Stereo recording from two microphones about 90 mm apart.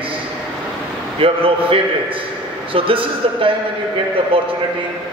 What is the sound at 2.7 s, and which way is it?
Speech, 80° right.